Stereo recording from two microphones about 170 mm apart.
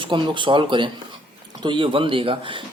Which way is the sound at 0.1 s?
30° right (ahead or behind).